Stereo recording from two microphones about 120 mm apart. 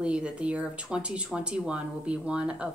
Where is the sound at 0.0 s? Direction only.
10° right (ahead or behind).